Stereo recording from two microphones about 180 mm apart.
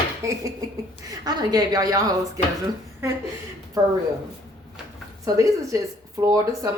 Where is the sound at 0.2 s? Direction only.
15° right (ahead or behind).